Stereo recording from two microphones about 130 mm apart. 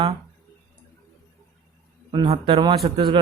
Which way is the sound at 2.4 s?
40° right (ahead or behind).